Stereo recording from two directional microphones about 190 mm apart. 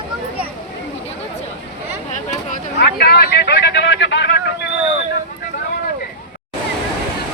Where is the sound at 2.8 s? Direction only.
60° left (ahead or behind).